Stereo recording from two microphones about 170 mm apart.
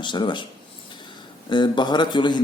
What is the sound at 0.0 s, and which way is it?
Speech, 25° left (ahead or behind).